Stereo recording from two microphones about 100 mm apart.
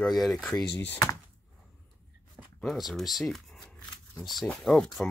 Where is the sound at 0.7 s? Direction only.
20° left (ahead or behind).